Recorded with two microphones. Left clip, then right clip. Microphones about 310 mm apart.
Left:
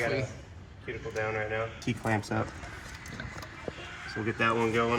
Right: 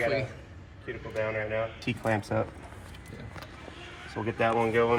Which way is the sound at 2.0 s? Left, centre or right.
Centre.